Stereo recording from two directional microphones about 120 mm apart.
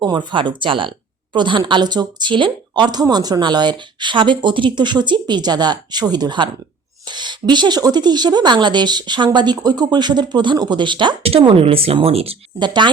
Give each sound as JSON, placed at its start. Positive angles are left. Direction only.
{"t": 0.0, "sound": "a woman's voice", "side_deg": -40}
{"t": 12.5, "sound": "a woman's voice", "side_deg": -40}